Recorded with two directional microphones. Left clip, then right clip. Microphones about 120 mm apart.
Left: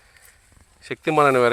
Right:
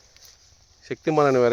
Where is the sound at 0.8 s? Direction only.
30° right (ahead or behind).